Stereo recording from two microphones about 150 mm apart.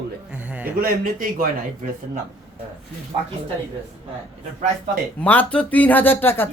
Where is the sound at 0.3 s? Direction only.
10° right (ahead or behind).